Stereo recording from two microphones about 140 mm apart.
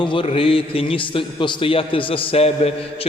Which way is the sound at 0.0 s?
35° left (ahead or behind).